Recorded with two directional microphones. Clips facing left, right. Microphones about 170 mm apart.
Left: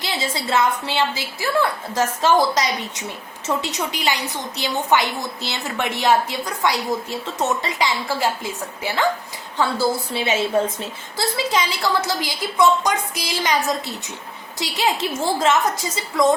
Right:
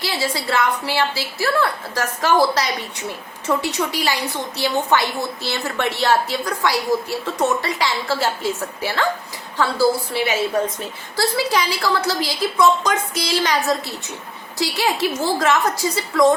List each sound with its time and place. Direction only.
0.0 s a woman's voice: 20° left (ahead or behind)
14.6 s a woman's voice: 20° left (ahead or behind)